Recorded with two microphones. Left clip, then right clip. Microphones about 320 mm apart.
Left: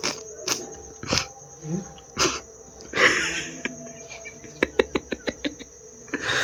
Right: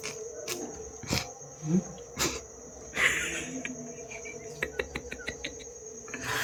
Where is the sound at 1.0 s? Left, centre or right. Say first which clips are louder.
Left 8 dB; centre.